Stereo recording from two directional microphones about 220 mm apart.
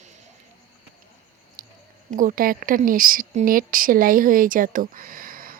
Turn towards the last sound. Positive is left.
turn(degrees=-40)  # may be behind; listen again after turning